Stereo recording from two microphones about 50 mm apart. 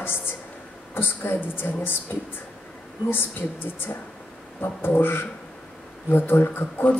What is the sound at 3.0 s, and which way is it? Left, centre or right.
A woman's voice, left.